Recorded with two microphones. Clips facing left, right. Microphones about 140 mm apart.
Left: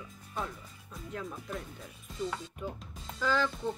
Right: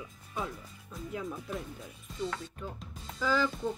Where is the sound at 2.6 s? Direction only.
10° left (ahead or behind).